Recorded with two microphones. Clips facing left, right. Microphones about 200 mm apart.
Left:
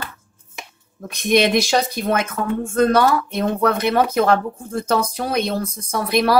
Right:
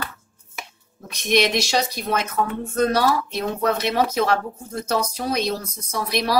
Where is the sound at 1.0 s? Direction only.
55° left (ahead or behind).